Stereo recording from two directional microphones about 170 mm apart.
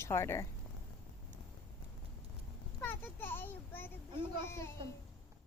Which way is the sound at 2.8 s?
10° left (ahead or behind).